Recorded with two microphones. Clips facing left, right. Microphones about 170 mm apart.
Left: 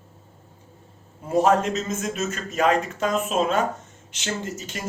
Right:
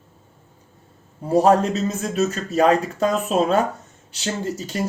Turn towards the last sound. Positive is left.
turn(degrees=-35)  # may be behind; listen again after turning